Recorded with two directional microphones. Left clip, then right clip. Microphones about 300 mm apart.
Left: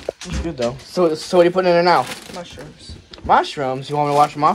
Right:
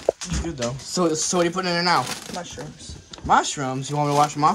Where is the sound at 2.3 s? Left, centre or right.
Right.